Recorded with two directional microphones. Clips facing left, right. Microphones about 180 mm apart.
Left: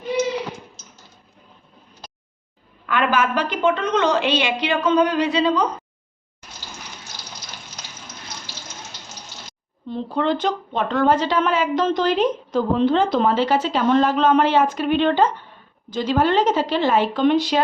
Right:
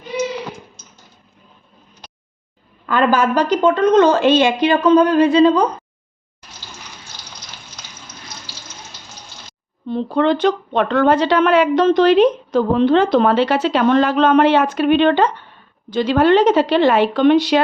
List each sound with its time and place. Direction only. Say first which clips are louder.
2.8 s a woman's voice: right 5 dB; 40° right (ahead or behind)
9.9 s a woman's voice: right 5 dB; 70° right (ahead or behind)